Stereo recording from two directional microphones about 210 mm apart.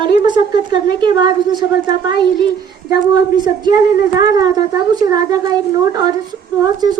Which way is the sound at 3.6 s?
20° right (ahead or behind).